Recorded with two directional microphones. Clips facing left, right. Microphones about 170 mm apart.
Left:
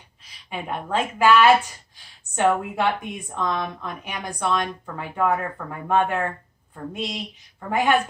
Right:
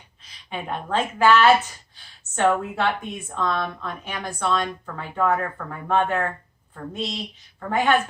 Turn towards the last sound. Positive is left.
turn(degrees=15)  # may be behind; listen again after turning